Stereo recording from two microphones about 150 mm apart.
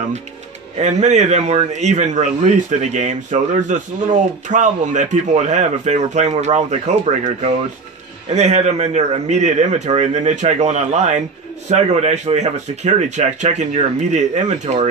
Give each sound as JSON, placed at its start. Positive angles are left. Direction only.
{"t": 0.7, "sound": "a man's voice", "side_deg": -50}
{"t": 8.3, "sound": "a man's voice", "side_deg": -45}